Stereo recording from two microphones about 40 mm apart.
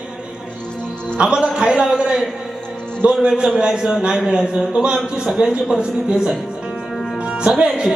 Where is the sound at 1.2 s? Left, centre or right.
Centre.